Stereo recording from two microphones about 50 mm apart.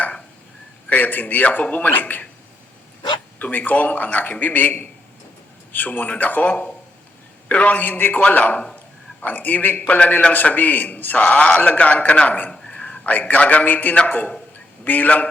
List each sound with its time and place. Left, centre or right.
0.9 s a man's voice: left
3.3 s a man's voice: left